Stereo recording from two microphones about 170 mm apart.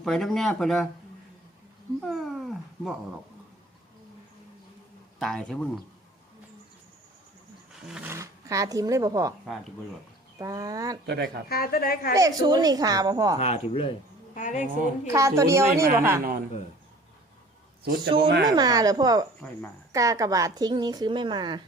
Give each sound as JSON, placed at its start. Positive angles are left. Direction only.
{"t": 0.0, "sound": "speech", "side_deg": 0}
{"t": 2.0, "sound": "speech", "side_deg": 0}
{"t": 5.2, "sound": "speech", "side_deg": 5}
{"t": 7.7, "sound": "roaring cats", "side_deg": -5}
{"t": 8.1, "sound": "a woman's voice", "side_deg": -20}
{"t": 10.3, "sound": "a woman's voice", "side_deg": -20}
{"t": 11.0, "sound": "speech", "side_deg": -75}
{"t": 11.4, "sound": "a woman's voice", "side_deg": 60}
{"t": 12.1, "sound": "a woman's voice", "side_deg": -20}
{"t": 13.4, "sound": "speech", "side_deg": 35}
{"t": 14.3, "sound": "a woman's voice", "side_deg": 45}
{"t": 15.0, "sound": "a woman's voice", "side_deg": -15}
{"t": 18.2, "sound": "speech", "side_deg": -75}
{"t": 18.4, "sound": "a woman's voice", "side_deg": -25}